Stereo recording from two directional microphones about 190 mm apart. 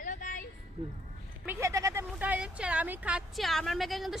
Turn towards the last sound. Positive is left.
turn(degrees=0)  # may be behind; listen again after turning